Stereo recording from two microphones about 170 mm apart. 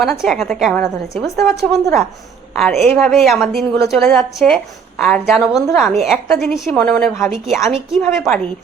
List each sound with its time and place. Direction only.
0.0 s a woman's voice: 5° left (ahead or behind)
1.1 s a woman's voice: 15° left (ahead or behind)
1.7 s a woman's voice: centre (ahead or behind)